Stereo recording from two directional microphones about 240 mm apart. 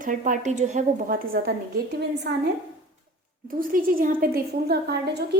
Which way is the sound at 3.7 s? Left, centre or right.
Right.